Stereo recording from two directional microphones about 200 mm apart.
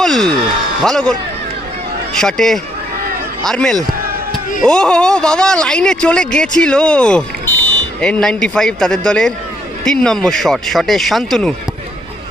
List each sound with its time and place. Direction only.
0.0 s a sound: centre (ahead or behind)
0.8 s speech: 5° left (ahead or behind)
2.1 s speech: centre (ahead or behind)